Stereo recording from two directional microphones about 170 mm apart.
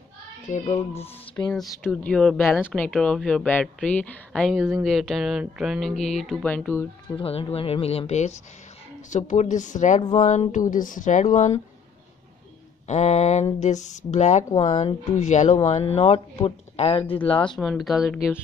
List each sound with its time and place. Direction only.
0.5 s speech: 40° left (ahead or behind)
1.4 s speech: 15° left (ahead or behind)
1.9 s speech: 5° left (ahead or behind)
7.2 s speech: 35° left (ahead or behind)
12.8 s speech: 45° left (ahead or behind)
17.6 s speech: centre (ahead or behind)